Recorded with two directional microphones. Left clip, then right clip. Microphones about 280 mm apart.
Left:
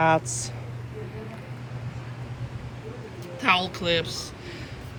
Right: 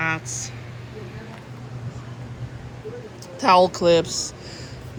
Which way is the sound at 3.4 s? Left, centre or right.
Centre.